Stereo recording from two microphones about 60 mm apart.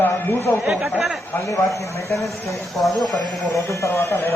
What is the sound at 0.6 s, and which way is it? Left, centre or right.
Speech, centre.